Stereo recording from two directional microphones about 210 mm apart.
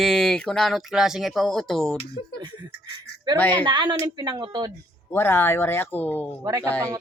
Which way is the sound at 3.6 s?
20° right (ahead or behind).